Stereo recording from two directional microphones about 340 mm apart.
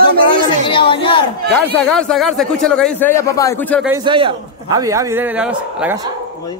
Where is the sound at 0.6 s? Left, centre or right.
Centre.